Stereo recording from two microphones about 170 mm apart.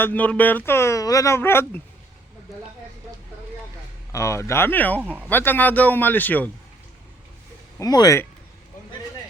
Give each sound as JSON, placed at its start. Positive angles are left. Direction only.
{"t": 0.0, "sound": "speech", "side_deg": 10}
{"t": 4.1, "sound": "speech", "side_deg": 15}
{"t": 5.0, "sound": "speech", "side_deg": -10}
{"t": 5.3, "sound": "speech", "side_deg": 10}
{"t": 7.8, "sound": "speech", "side_deg": 20}